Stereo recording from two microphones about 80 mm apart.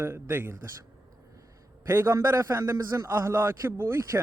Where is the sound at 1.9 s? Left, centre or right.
Right.